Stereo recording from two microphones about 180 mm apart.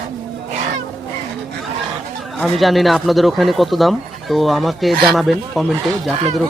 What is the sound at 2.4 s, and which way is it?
Speech, centre (ahead or behind).